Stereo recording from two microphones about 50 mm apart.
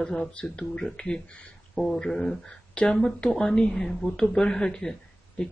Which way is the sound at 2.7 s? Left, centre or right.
Left.